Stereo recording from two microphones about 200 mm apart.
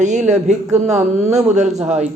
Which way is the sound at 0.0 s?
35° right (ahead or behind).